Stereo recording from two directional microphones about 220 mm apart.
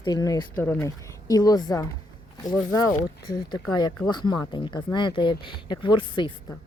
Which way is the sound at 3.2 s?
20° left (ahead or behind).